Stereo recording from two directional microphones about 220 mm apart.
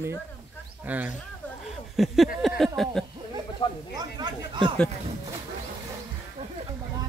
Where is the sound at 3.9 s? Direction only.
20° right (ahead or behind).